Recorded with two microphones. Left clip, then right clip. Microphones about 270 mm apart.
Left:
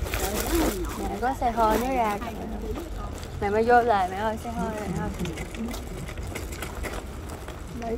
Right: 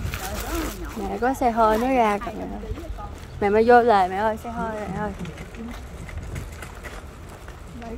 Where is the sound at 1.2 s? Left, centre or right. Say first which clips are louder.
Right 4 dB; right.